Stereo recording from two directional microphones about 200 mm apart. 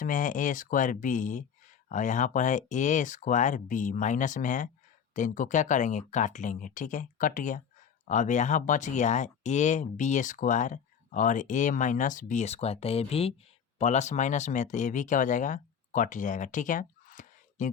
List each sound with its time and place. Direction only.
0.0 s speech: 40° left (ahead or behind)